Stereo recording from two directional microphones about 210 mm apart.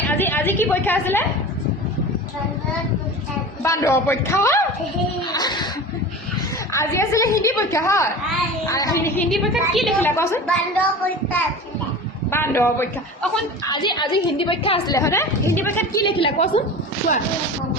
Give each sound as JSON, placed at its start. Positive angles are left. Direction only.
{"t": 0.1, "sound": "a woman's voice", "side_deg": 10}
{"t": 3.6, "sound": "a woman's voice", "side_deg": 15}
{"t": 6.7, "sound": "a woman's voice", "side_deg": 15}
{"t": 9.3, "sound": "a woman's voice", "side_deg": 0}
{"t": 10.2, "sound": "a woman's voice", "side_deg": 10}
{"t": 12.3, "sound": "a man's voice", "side_deg": 10}
{"t": 14.9, "sound": "a woman's voice", "side_deg": 15}
{"t": 16.0, "sound": "a woman's voice", "side_deg": 25}